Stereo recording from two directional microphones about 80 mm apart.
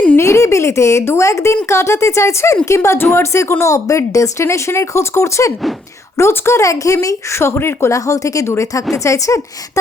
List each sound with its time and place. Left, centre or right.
0.2 s speech: left